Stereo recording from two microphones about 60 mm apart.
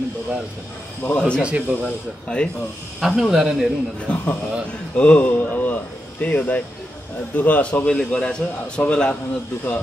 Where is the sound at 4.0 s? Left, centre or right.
Centre.